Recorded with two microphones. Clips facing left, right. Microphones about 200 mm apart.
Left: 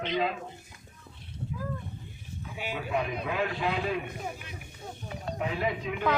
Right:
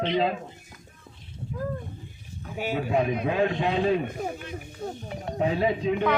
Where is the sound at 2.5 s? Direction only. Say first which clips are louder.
Right 8 dB; 45° right (ahead or behind).